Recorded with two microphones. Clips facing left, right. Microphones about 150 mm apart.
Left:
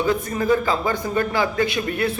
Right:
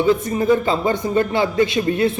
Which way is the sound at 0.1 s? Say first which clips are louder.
Right 4 dB; 25° right (ahead or behind).